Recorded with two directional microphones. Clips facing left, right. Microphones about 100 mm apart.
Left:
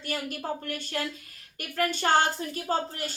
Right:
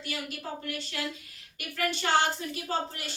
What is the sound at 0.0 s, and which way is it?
A woman's voice, 45° left (ahead or behind).